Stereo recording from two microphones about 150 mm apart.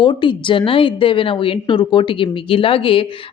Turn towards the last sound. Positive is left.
turn(degrees=35)  # may be behind; listen again after turning